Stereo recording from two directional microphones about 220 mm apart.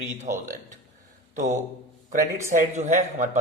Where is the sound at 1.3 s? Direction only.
35° right (ahead or behind).